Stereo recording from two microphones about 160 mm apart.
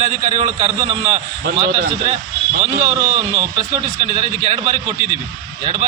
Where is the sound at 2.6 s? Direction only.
45° right (ahead or behind).